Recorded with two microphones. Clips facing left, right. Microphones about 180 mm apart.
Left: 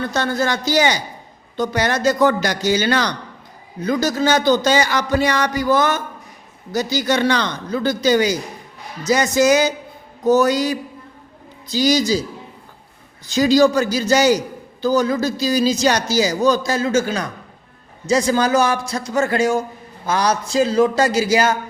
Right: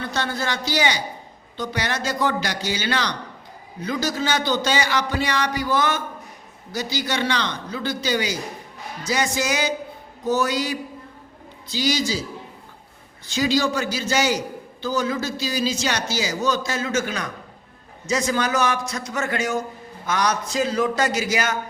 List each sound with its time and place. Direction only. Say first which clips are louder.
0.0 s a man's voice: left 6 dB; 45° left (ahead or behind)
13.3 s a man's voice: left 8 dB; 40° left (ahead or behind)